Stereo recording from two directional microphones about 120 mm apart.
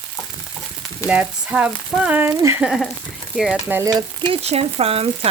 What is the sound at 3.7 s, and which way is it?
Frying, 15° right (ahead or behind).